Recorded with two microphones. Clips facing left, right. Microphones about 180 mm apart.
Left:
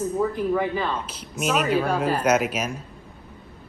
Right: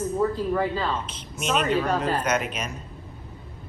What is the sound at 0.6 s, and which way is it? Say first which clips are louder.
A woman's voice: left 1 dB; 15° left (ahead or behind).